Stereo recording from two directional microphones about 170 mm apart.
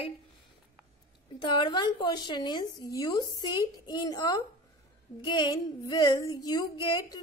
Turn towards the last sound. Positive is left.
turn(degrees=25)  # may be behind; listen again after turning